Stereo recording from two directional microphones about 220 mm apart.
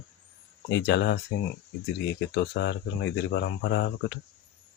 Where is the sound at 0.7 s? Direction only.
50° left (ahead or behind).